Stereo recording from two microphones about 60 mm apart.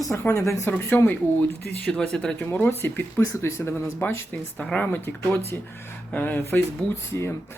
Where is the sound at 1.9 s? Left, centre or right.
Centre.